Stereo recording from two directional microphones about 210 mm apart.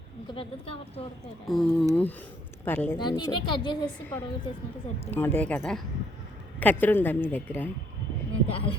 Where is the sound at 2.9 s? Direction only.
20° left (ahead or behind).